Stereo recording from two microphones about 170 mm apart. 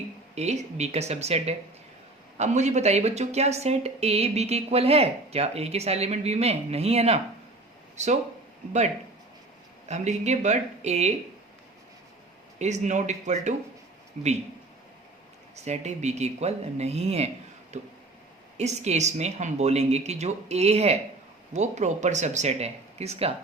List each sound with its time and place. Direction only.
0.3 s a woman's voice: 40° right (ahead or behind)
9.9 s a woman's voice: 40° right (ahead or behind)
12.5 s speech: 45° right (ahead or behind)
15.5 s a woman's voice: 40° right (ahead or behind)